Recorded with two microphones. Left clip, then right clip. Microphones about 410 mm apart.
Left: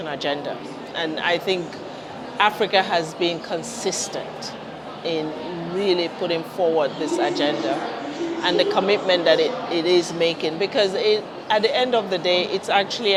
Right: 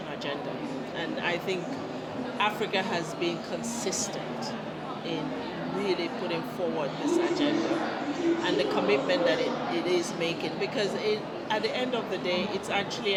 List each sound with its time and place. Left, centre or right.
0.9 s speech: left
5.8 s speech: left